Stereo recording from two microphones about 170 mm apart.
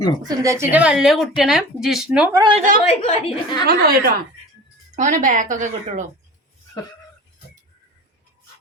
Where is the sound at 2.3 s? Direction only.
25° right (ahead or behind).